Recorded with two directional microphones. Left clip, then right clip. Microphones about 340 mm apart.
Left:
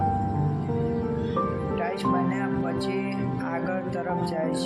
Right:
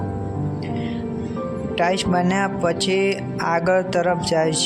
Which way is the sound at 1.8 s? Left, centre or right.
Right.